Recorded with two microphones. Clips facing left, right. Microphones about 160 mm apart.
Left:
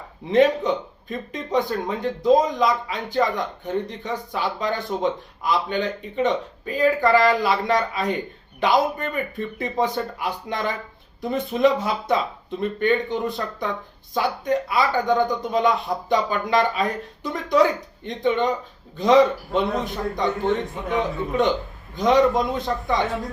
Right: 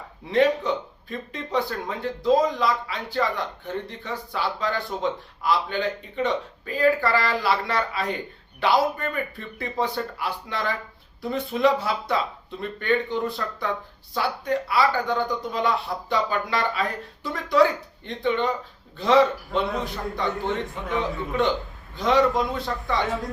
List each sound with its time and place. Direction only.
0.3 s speech: 20° left (ahead or behind)
20.3 s a man's voice: centre (ahead or behind)
21.9 s speech: 20° left (ahead or behind)
23.0 s a man's voice: centre (ahead or behind)